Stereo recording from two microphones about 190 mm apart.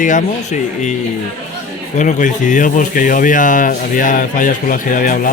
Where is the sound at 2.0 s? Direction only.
40° left (ahead or behind).